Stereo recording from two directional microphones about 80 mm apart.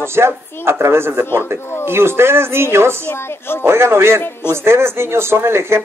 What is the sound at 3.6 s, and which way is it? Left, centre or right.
Speech, right.